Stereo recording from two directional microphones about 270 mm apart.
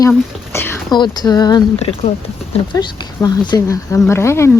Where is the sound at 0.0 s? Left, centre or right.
Centre.